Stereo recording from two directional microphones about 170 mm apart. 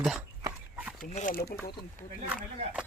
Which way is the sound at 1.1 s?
50° left (ahead or behind).